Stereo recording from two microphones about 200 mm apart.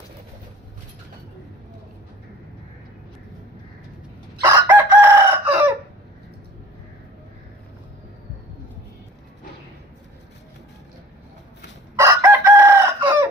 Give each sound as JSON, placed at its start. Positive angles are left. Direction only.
{"t": 4.4, "sound": "chicken", "side_deg": -20}
{"t": 4.7, "sound": "chicken", "side_deg": -10}
{"t": 11.9, "sound": "chicken", "side_deg": -10}